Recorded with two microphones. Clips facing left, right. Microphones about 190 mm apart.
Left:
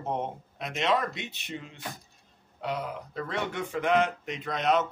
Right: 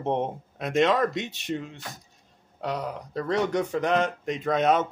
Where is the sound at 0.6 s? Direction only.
50° right (ahead or behind).